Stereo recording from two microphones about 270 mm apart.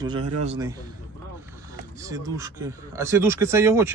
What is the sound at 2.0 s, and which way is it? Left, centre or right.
Speech, centre.